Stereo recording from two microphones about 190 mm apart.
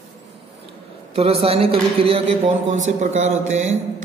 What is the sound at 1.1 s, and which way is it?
Speech, 30° right (ahead or behind).